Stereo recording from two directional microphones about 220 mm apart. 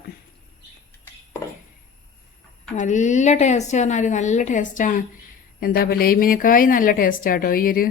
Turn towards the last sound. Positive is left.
turn(degrees=40)  # may be behind; listen again after turning